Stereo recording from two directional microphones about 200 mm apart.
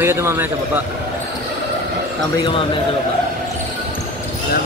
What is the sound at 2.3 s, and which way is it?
Speech, 25° left (ahead or behind).